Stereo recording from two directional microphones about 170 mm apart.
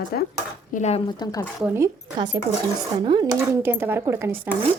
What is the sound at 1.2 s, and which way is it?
Speech, 20° left (ahead or behind).